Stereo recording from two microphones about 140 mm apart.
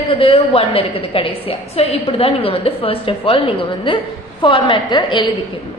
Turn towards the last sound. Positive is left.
turn(degrees=35)  # may be behind; listen again after turning